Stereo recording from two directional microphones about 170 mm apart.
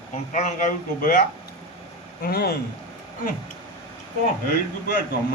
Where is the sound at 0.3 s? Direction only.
50° left (ahead or behind).